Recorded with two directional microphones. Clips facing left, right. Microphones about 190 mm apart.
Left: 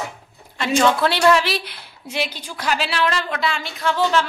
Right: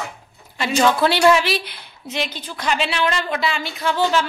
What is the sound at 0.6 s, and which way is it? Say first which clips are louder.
A woman's voice: even; 5° right (ahead or behind).